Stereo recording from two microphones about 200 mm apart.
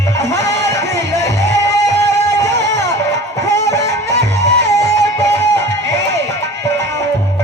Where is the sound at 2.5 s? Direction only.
60° right (ahead or behind).